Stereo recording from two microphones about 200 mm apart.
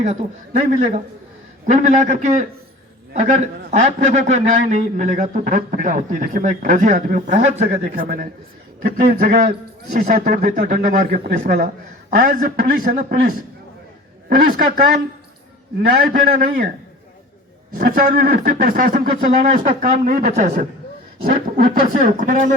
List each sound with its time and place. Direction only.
0.0 s a man's voice: 35° right (ahead or behind)
15.9 s speech: 45° right (ahead or behind)
17.7 s speech: 45° right (ahead or behind)